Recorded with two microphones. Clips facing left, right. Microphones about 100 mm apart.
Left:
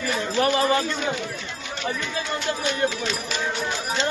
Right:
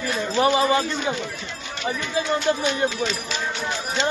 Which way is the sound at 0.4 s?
20° right (ahead or behind).